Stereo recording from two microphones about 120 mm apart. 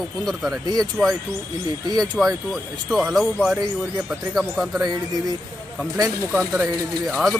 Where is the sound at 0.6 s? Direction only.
35° right (ahead or behind).